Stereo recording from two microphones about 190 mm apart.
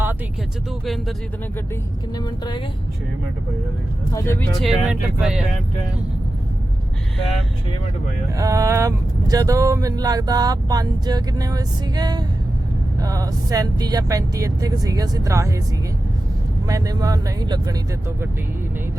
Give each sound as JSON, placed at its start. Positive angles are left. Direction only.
{"t": 2.1, "sound": "speech", "side_deg": 20}
{"t": 4.1, "sound": "speech", "side_deg": 15}
{"t": 4.6, "sound": "speech", "side_deg": -5}
{"t": 8.4, "sound": "speech", "side_deg": -15}
{"t": 16.6, "sound": "speech", "side_deg": -20}